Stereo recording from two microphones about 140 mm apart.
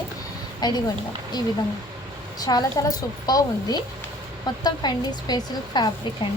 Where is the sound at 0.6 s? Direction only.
30° left (ahead or behind).